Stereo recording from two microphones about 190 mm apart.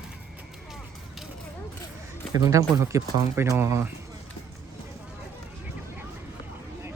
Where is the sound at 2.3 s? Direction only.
15° right (ahead or behind).